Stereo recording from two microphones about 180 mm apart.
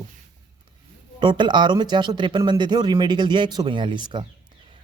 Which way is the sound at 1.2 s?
25° right (ahead or behind).